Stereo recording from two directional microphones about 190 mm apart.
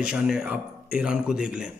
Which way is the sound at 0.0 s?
5° right (ahead or behind).